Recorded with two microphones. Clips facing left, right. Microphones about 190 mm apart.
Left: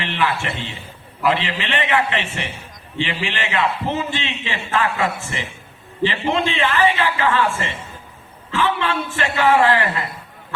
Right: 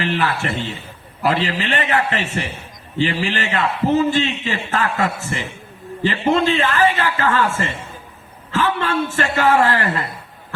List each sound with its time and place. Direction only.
0.0 s a man's voice: 40° right (ahead or behind)